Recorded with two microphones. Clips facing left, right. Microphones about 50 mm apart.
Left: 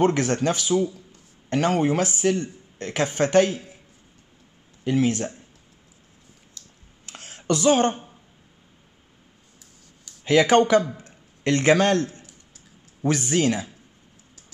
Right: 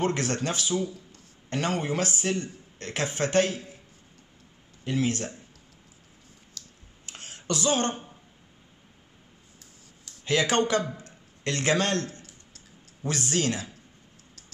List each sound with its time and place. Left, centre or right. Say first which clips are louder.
0.0 s speech: left 7 dB; left
4.9 s speech: left 5 dB; left
7.2 s a sound: left 7 dB; left
7.5 s speech: left 7 dB; left
7.9 s a sound: left 1 dB; centre
10.2 s speech: left 7 dB; left